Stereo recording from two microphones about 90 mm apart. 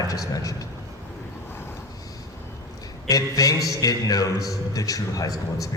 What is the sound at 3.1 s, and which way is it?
A man's voice, 40° left (ahead or behind).